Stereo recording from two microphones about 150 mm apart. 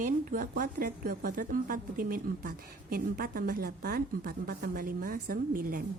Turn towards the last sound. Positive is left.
turn(degrees=-70)  # may be behind; listen again after turning